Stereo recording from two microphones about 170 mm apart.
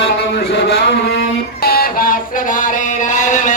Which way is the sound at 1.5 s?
65° left (ahead or behind).